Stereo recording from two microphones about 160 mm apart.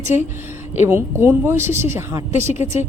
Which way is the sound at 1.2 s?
15° right (ahead or behind).